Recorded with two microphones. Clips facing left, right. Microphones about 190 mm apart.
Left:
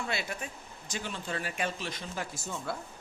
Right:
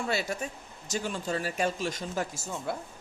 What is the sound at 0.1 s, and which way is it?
Speech, 40° right (ahead or behind).